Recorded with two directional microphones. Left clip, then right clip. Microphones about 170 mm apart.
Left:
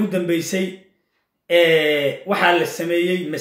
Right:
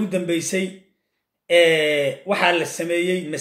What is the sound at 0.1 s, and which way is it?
Speech, 20° right (ahead or behind).